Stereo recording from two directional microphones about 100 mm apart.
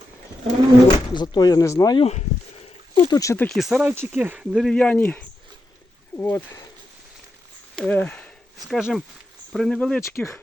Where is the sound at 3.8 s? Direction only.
20° right (ahead or behind).